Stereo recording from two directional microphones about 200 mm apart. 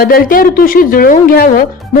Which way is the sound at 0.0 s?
45° left (ahead or behind).